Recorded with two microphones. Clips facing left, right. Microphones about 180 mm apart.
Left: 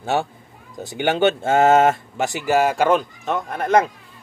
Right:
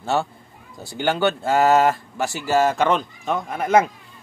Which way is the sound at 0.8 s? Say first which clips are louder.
Left 3 dB; 20° left (ahead or behind).